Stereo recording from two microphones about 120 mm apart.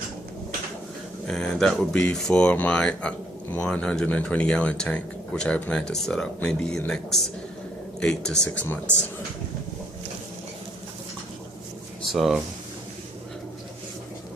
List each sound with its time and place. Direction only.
1.3 s speech: 5° left (ahead or behind)
12.1 s speech: centre (ahead or behind)